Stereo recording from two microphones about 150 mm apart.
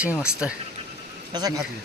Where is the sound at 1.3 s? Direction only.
25° right (ahead or behind).